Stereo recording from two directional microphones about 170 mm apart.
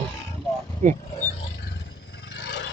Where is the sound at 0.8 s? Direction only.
50° right (ahead or behind).